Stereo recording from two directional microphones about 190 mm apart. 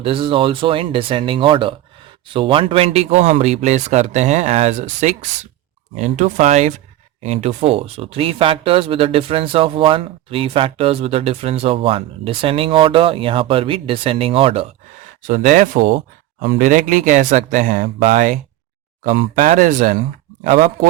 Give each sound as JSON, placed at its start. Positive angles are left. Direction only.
{"t": 0.0, "sound": "speech", "side_deg": -30}
{"t": 15.3, "sound": "speech", "side_deg": -40}